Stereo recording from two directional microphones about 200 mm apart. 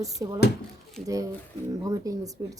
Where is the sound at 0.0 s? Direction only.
15° right (ahead or behind).